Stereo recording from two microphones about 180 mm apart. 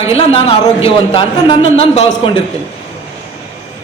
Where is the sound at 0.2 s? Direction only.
30° left (ahead or behind).